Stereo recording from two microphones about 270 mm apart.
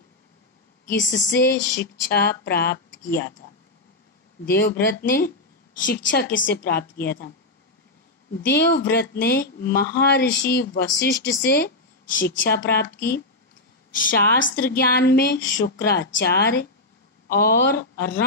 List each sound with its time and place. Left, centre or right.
0.8 s speech: left
4.5 s speech: left
8.4 s speech: left